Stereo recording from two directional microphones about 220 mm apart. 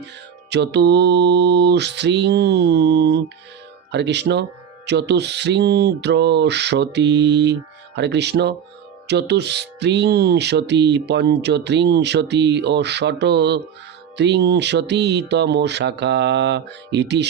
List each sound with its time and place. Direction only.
0.5 s music: 50° right (ahead or behind)